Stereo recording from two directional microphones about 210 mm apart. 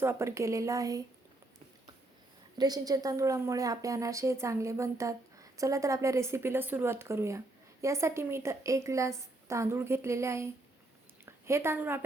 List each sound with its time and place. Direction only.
0.0 s a woman's voice: 15° right (ahead or behind)
2.6 s a woman's voice: 20° right (ahead or behind)